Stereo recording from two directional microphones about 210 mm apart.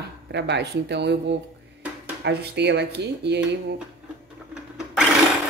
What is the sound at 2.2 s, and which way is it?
Speech, 55° right (ahead or behind).